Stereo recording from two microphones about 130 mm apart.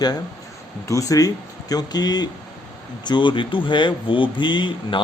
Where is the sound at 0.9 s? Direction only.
25° left (ahead or behind).